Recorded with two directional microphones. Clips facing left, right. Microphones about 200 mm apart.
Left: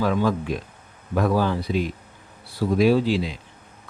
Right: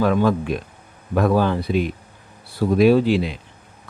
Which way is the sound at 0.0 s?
60° right (ahead or behind).